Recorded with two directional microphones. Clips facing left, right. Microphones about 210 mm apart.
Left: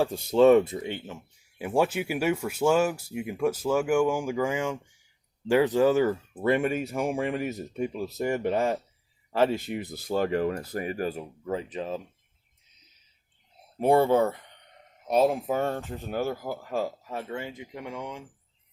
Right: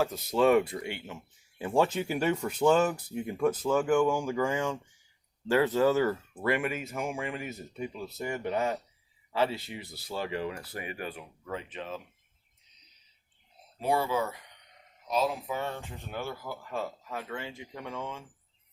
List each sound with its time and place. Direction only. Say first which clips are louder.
0.0 s speech: left 6 dB; 30° left (ahead or behind)
6.7 s speech: left 6 dB; 40° left (ahead or behind)
7.1 s speech: left 7 dB; 55° left (ahead or behind)
7.4 s speech: left 7 dB; 40° left (ahead or behind)
13.7 s speech: left 8 dB; 55° left (ahead or behind); by 18.3 s 15° left (ahead or behind)